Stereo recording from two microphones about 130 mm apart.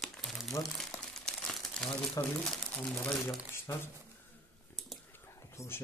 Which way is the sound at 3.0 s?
15° left (ahead or behind).